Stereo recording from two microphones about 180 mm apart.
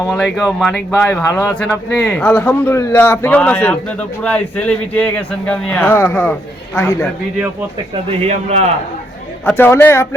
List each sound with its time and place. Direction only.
0.1 s speech: 5° left (ahead or behind)
8.2 s a man's voice: 35° right (ahead or behind)
9.5 s speech: 10° left (ahead or behind)